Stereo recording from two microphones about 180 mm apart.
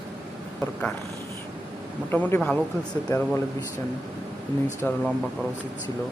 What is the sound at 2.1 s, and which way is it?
Speech, 10° left (ahead or behind).